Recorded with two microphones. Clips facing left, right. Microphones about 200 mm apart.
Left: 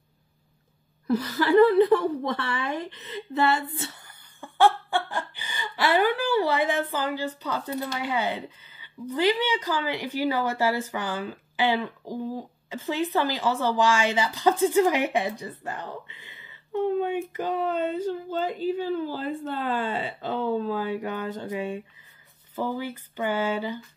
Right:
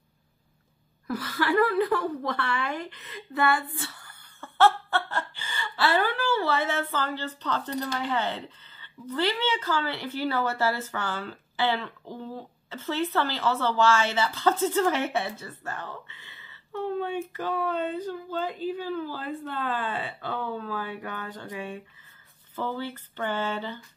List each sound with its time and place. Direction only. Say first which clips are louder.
1.0 s a woman's voice: left 4 dB; 20° left (ahead or behind)